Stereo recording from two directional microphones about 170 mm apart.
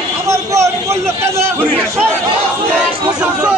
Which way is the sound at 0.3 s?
15° right (ahead or behind).